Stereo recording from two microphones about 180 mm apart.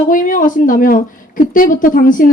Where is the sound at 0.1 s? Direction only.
50° left (ahead or behind).